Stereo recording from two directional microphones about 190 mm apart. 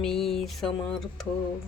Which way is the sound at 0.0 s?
Centre (ahead or behind).